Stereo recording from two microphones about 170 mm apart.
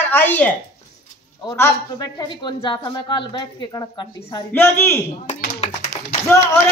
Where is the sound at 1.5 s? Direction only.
20° left (ahead or behind).